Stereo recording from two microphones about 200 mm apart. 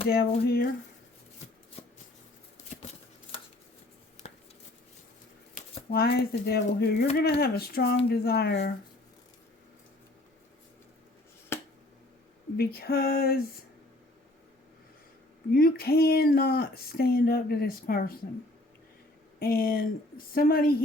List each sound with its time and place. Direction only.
0.1 s speech: 50° left (ahead or behind)
1.8 s a sound: 30° left (ahead or behind)
4.2 s a sound: 30° left (ahead or behind)
5.9 s speech: 50° left (ahead or behind)
12.5 s speech: 50° left (ahead or behind)
15.5 s speech: 50° left (ahead or behind)
19.4 s speech: 45° left (ahead or behind)